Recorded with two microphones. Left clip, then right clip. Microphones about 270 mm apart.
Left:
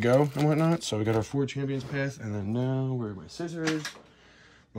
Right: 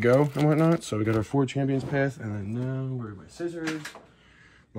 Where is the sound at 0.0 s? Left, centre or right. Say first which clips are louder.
Right 2 dB; centre.